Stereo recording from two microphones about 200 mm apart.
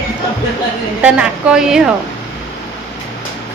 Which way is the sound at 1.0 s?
5° right (ahead or behind).